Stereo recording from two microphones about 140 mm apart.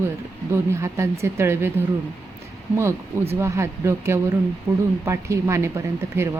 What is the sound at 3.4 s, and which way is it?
A woman's voice, 20° right (ahead or behind).